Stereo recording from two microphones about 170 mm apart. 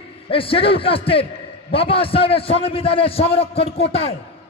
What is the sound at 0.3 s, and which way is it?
A man's voice, 30° left (ahead or behind).